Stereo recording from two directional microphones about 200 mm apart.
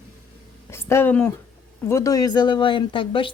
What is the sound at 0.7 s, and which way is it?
Speech, 10° left (ahead or behind).